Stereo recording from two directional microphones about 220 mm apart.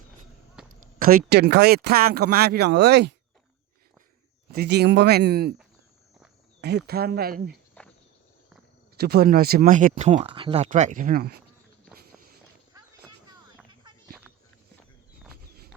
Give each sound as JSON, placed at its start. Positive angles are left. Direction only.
{"t": 0.7, "sound": "speech", "side_deg": -40}
{"t": 4.5, "sound": "speech", "side_deg": -45}
{"t": 6.6, "sound": "speech", "side_deg": -50}
{"t": 9.0, "sound": "speech", "side_deg": -45}
{"t": 11.9, "sound": "walk", "side_deg": -40}